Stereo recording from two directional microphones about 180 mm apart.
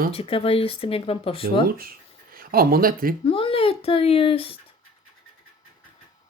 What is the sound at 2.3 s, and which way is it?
Speech, 55° right (ahead or behind).